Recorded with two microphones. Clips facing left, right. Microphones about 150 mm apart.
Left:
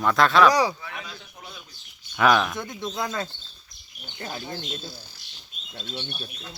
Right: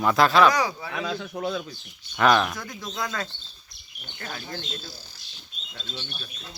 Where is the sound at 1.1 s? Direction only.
90° right.